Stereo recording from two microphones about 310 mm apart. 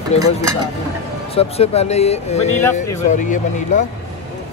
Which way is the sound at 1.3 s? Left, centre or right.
Centre.